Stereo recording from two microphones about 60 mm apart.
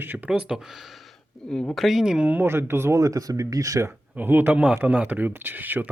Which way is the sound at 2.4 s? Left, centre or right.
Right.